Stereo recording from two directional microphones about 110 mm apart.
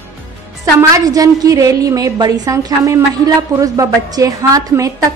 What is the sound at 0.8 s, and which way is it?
A woman's voice, 30° right (ahead or behind).